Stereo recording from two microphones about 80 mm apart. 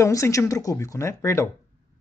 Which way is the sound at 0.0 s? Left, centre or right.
Left.